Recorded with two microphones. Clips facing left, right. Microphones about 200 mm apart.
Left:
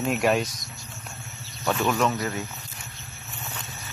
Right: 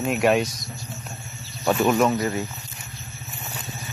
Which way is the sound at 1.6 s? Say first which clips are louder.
Right 4 dB; 10° right (ahead or behind).